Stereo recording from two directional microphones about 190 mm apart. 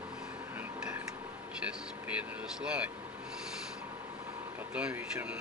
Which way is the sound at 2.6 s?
5° right (ahead or behind).